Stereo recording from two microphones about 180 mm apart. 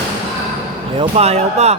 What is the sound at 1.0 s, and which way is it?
Speech, 35° right (ahead or behind).